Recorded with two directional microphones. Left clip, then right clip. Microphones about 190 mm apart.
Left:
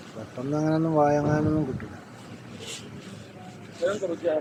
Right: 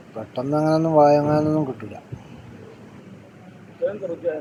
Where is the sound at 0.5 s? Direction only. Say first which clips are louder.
Right 7 dB; 10° right (ahead or behind).